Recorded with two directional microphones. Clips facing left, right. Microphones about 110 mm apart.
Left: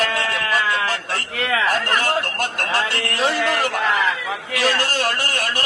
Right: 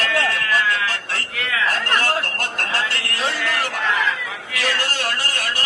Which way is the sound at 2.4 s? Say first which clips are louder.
Left 3 dB; 20° left (ahead or behind).